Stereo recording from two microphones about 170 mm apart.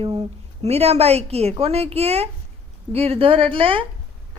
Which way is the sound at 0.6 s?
35° right (ahead or behind).